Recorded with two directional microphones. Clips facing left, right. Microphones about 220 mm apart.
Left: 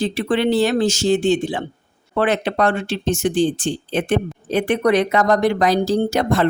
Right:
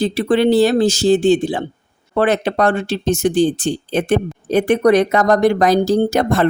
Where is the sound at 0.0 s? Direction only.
40° right (ahead or behind).